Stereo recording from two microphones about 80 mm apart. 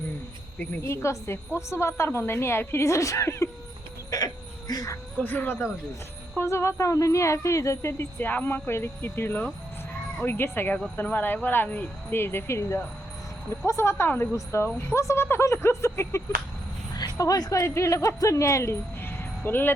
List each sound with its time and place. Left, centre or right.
0.8 s speech: left
4.1 s a sound: left
4.7 s music: left
5.2 s speech: left
6.4 s speech: left
17.2 s speech: left